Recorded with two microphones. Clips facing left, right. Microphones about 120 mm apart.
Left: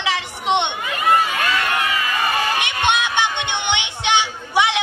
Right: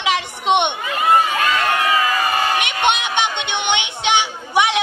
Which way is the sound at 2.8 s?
15° right (ahead or behind).